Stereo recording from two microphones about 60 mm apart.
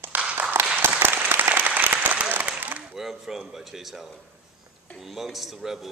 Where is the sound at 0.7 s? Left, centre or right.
Right.